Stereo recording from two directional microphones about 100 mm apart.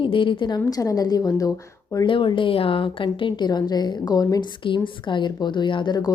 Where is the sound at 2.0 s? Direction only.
55° left (ahead or behind); by 4.4 s 40° left (ahead or behind).